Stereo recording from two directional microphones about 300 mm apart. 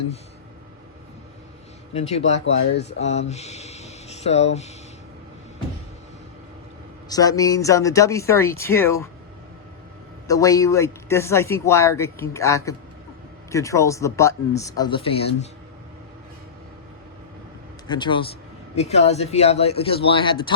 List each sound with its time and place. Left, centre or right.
1.9 s a man's voice: left
7.1 s a man's voice: centre
10.2 s a man's voice: centre
17.8 s a man's voice: centre